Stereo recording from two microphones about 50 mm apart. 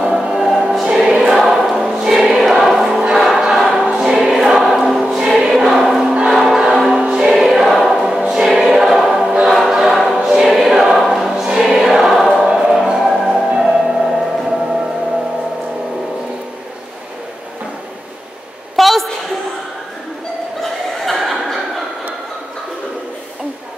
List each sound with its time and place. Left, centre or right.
0.0 s choir: centre
1.2 s choir: centre
6.4 s music: centre
7.2 s music: centre
8.3 s choir: centre
12.4 s music: centre
18.8 s a sound: centre
20.6 s chuckle: centre